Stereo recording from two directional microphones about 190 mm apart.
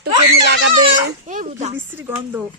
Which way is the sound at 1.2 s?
40° right (ahead or behind).